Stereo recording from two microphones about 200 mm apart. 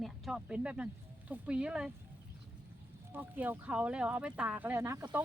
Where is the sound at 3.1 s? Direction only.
10° right (ahead or behind).